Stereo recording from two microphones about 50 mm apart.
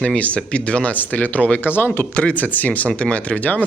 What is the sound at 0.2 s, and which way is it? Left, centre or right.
Speech, left.